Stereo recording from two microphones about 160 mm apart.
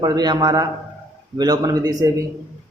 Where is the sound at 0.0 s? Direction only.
25° right (ahead or behind).